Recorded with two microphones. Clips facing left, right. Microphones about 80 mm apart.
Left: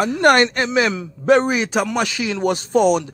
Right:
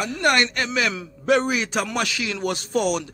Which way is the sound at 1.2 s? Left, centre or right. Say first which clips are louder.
Left 5 dB; left.